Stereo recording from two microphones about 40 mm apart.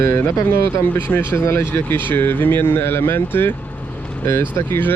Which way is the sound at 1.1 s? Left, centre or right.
Left.